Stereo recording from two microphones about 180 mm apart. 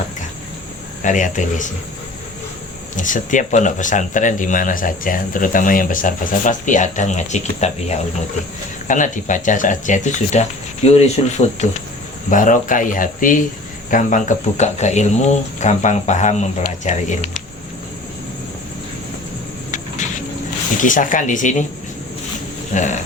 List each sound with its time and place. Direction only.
1.0 s speech: 45° left (ahead or behind)
2.9 s speech: 45° left (ahead or behind)
19.7 s a sound: 45° left (ahead or behind)
20.8 s speech: 45° left (ahead or behind)
22.7 s speech: 45° left (ahead or behind)